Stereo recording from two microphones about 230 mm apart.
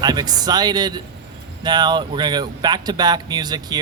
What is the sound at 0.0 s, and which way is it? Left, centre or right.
A man's voice, centre.